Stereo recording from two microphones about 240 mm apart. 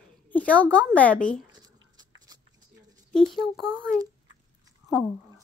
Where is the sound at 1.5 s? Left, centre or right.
Centre.